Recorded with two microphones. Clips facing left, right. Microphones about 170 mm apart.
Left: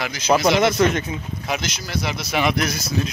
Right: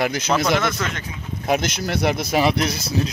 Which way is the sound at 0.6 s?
20° left (ahead or behind).